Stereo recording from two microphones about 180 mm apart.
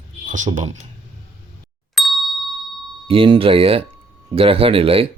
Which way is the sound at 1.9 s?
Centre (ahead or behind).